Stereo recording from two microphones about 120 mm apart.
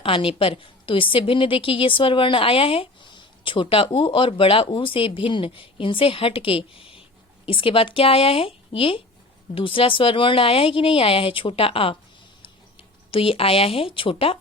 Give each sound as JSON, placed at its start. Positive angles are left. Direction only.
{"t": 0.0, "sound": "a woman's voice", "side_deg": 50}
{"t": 13.1, "sound": "a woman's voice", "side_deg": 50}